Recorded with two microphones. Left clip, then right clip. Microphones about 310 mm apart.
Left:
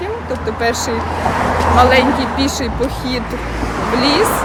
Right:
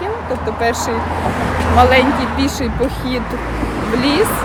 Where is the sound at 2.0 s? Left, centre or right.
Left.